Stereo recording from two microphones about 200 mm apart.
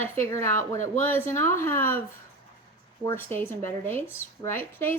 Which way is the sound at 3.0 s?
10° left (ahead or behind).